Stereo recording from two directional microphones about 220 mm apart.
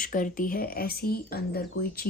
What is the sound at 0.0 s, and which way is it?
Speech, 40° left (ahead or behind).